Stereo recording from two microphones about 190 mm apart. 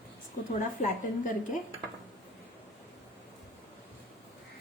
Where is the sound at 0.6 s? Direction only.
40° left (ahead or behind).